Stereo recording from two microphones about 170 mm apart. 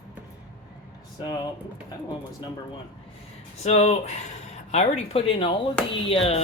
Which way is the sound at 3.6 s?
40° left (ahead or behind).